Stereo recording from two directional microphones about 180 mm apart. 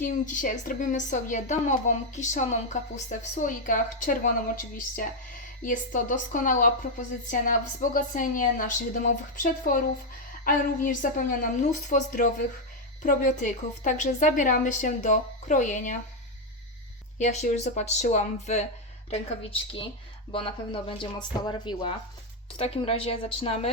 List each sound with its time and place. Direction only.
0.0 s a woman's voice: 45° left (ahead or behind)
5.6 s a woman's voice: 45° left (ahead or behind)
17.2 s speech: 40° left (ahead or behind)
19.4 s speech: 30° left (ahead or behind)